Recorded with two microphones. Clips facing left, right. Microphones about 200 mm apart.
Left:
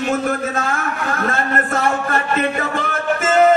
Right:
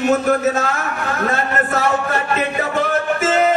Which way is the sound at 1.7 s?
55° left (ahead or behind).